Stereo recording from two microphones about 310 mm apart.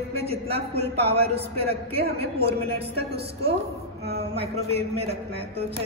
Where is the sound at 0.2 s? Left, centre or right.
Centre.